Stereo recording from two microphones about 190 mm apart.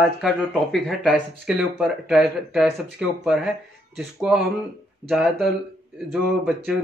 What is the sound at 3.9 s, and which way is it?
Speech, 5° right (ahead or behind).